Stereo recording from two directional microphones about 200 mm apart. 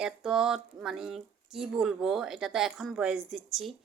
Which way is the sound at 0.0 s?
5° right (ahead or behind).